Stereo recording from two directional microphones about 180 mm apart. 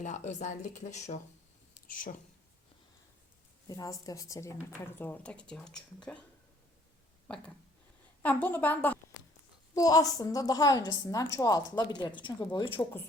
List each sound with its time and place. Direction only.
0.0 s speech: 40° left (ahead or behind)
3.7 s a woman's voice: 20° left (ahead or behind)
8.2 s a woman's voice: 10° left (ahead or behind); by 12.8 s 25° left (ahead or behind)